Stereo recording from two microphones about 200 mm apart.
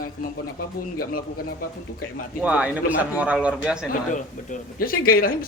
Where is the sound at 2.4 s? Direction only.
5° right (ahead or behind).